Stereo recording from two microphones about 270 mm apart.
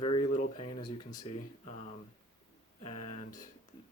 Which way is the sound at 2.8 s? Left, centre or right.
Left.